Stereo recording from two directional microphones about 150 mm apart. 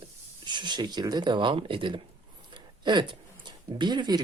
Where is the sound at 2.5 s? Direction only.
30° right (ahead or behind).